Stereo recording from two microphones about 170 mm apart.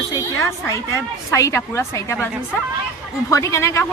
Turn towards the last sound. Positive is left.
turn(degrees=15)  # may be behind; listen again after turning